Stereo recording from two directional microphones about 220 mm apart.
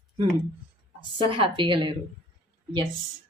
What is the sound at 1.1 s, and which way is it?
Speech, 25° right (ahead or behind).